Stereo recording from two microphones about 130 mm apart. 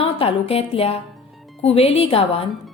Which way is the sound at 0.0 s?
50° left (ahead or behind).